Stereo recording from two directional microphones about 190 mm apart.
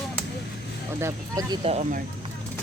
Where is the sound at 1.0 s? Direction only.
20° right (ahead or behind).